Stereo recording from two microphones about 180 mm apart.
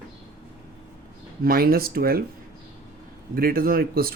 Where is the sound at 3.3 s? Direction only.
55° right (ahead or behind).